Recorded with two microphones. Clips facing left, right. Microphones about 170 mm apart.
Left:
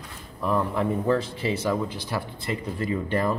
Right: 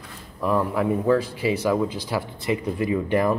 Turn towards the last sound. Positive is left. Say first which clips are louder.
# right 4 dB
turn(degrees=-15)  # may be behind; listen again after turning